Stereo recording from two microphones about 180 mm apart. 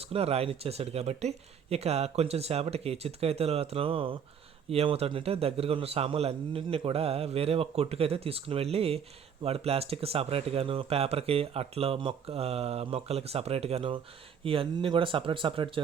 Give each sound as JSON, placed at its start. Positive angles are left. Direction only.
{"t": 0.0, "sound": "speech", "side_deg": -35}